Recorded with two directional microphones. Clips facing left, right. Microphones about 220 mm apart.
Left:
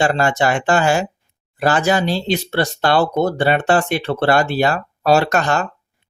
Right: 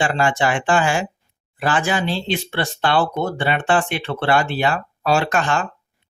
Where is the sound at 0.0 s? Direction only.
40° left (ahead or behind).